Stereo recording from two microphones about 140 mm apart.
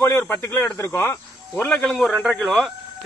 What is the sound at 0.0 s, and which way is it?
Speech, 15° left (ahead or behind).